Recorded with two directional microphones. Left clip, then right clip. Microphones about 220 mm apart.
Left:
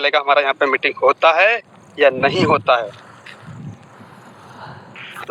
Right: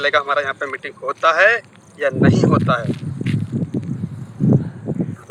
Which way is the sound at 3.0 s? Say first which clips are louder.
Right 10 dB; 15° left (ahead or behind).